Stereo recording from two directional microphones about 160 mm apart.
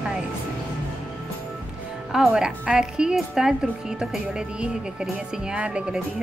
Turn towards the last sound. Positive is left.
turn(degrees=-5)  # may be behind; listen again after turning